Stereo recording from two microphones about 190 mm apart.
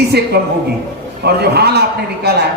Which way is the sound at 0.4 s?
55° right (ahead or behind).